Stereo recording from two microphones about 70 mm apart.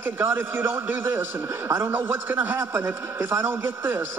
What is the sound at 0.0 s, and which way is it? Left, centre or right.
A man's voice, right.